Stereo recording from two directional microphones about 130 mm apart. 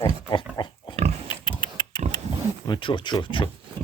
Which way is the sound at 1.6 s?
35° left (ahead or behind).